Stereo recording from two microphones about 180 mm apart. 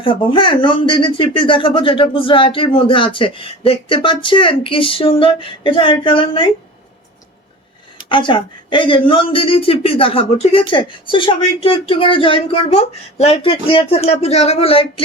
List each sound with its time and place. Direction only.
0.0 s speech: 30° left (ahead or behind)
8.1 s speech: 25° left (ahead or behind)